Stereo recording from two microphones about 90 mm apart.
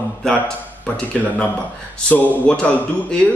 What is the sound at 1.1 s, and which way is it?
Speech, 15° left (ahead or behind).